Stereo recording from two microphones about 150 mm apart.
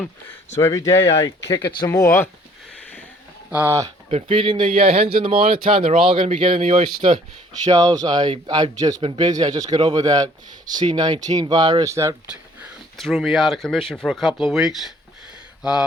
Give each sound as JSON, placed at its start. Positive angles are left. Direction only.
{"t": 0.6, "sound": "speech", "side_deg": 20}
{"t": 3.5, "sound": "speech", "side_deg": -15}
{"t": 4.1, "sound": "a man's voice", "side_deg": -35}
{"t": 7.6, "sound": "speech", "side_deg": -25}
{"t": 9.0, "sound": "a man's voice", "side_deg": -35}
{"t": 9.3, "sound": "speech", "side_deg": -25}
{"t": 12.3, "sound": "speech", "side_deg": -5}